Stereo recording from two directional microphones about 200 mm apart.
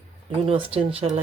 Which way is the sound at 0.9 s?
30° right (ahead or behind).